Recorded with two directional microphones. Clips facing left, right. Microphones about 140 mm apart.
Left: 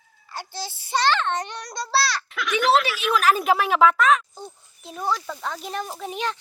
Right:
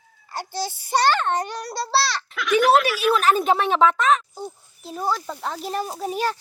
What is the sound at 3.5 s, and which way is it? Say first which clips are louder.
Speech: even; 30° right (ahead or behind).